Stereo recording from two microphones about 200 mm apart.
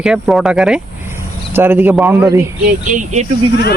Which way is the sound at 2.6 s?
40° right (ahead or behind).